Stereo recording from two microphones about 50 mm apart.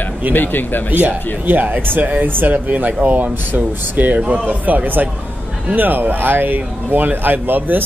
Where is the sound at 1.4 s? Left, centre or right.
Right.